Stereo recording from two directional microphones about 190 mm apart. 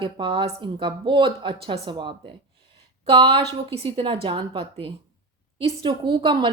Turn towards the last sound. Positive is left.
turn(degrees=-25)  # may be behind; listen again after turning